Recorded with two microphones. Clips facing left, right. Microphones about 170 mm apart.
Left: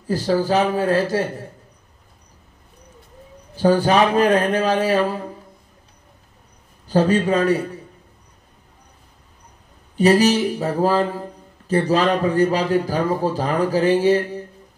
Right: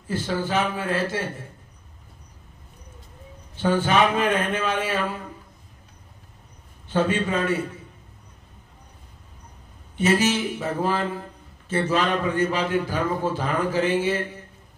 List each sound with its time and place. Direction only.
0.0 s a man's voice: 35° left (ahead or behind)
3.5 s a man's voice: 40° left (ahead or behind)
6.9 s a man's voice: 35° left (ahead or behind)
9.9 s a man's voice: 40° left (ahead or behind)